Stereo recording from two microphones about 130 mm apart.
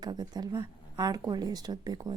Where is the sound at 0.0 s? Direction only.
30° right (ahead or behind).